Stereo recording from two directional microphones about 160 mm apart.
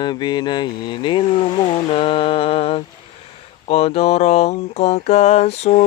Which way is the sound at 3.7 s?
40° left (ahead or behind).